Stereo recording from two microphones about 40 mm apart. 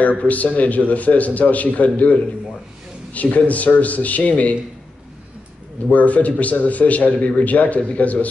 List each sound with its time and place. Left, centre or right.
0.2 s a man's voice: left
5.9 s a man's voice: left